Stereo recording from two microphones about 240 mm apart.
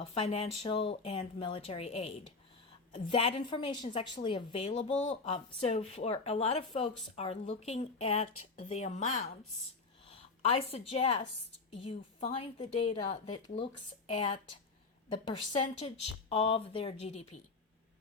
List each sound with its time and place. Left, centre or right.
0.0 s a woman's voice: left